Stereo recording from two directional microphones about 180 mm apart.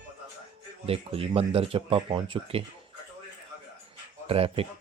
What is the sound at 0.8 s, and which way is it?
Speech, 35° right (ahead or behind).